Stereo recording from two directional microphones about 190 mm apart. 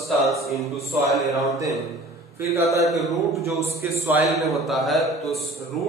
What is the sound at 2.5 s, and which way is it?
A man's voice, 15° right (ahead or behind).